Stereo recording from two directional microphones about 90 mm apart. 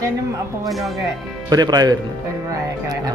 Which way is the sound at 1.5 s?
50° right (ahead or behind).